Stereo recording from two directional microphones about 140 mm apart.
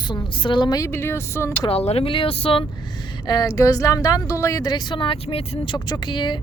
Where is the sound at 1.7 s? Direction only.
45° left (ahead or behind).